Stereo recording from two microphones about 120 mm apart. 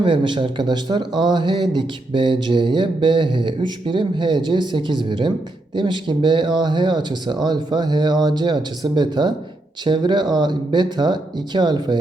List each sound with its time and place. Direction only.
0.0 s speech: 40° right (ahead or behind)